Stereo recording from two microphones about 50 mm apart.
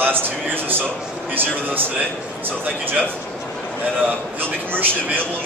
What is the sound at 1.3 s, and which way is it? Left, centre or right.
Speech, right.